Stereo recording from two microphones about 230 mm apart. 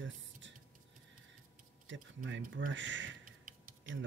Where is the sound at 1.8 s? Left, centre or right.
Right.